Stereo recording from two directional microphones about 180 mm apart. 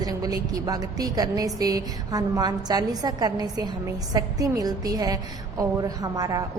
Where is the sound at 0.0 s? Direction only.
20° right (ahead or behind).